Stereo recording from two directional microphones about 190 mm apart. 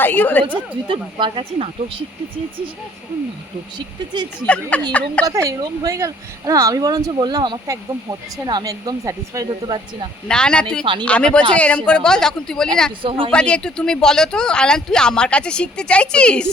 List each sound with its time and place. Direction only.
0.0 s a woman's voice: 10° left (ahead or behind)
0.9 s speech: 25° right (ahead or behind)
3.8 s speech: 25° right (ahead or behind)
4.4 s speech: 5° left (ahead or behind)
5.2 s speech: 15° right (ahead or behind)
10.2 s speech: 5° left (ahead or behind)
13.0 s speech: 30° right (ahead or behind)
13.3 s speech: 5° left (ahead or behind)